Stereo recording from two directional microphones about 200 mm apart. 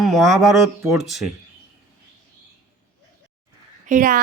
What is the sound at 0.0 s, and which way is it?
Speech, centre (ahead or behind).